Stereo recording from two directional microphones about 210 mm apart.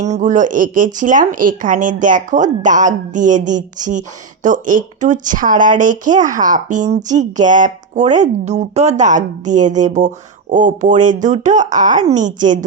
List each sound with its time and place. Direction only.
0.0 s speech: 35° right (ahead or behind)